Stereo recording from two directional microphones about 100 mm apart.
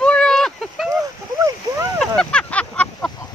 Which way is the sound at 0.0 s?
5° left (ahead or behind).